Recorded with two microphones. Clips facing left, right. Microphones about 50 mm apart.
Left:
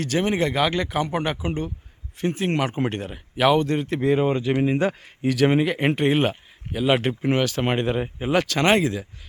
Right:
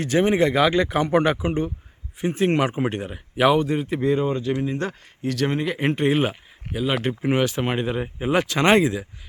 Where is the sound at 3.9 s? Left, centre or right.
Centre.